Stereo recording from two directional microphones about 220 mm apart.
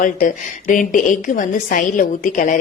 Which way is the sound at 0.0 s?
35° left (ahead or behind).